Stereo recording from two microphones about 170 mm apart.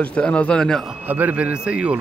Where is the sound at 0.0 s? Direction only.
5° left (ahead or behind).